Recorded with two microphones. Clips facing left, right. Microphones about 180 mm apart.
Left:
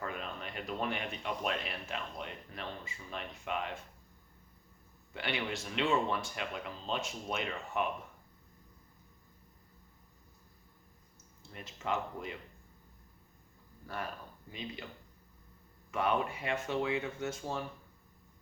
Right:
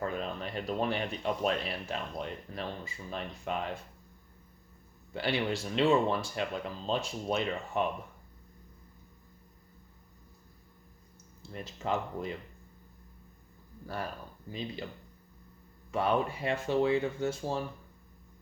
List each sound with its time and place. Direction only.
0.0 s speech: 35° right (ahead or behind)
5.1 s speech: 35° right (ahead or behind)
11.5 s speech: 35° right (ahead or behind)
13.9 s speech: 35° right (ahead or behind)
15.9 s speech: 35° right (ahead or behind)